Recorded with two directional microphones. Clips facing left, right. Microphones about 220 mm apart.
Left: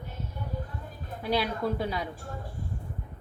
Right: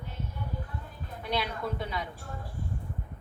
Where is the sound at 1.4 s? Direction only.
35° left (ahead or behind).